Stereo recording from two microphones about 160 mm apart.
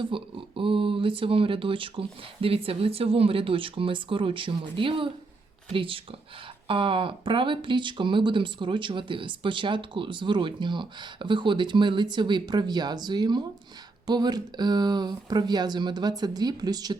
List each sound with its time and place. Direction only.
0.0 s speech: 30° right (ahead or behind)